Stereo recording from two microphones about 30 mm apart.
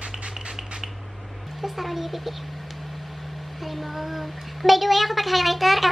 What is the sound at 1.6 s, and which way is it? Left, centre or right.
Speech, centre.